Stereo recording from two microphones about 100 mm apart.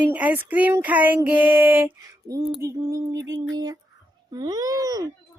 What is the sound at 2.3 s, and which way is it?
A child's voice, 35° right (ahead or behind).